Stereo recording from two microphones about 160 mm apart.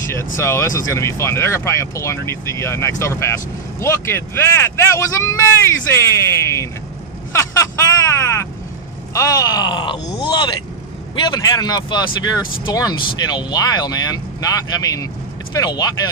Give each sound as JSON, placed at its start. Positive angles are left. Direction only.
{"t": 0.4, "sound": "speech", "side_deg": 20}
{"t": 7.3, "sound": "vehicle", "side_deg": 20}
{"t": 9.1, "sound": "speech", "side_deg": 20}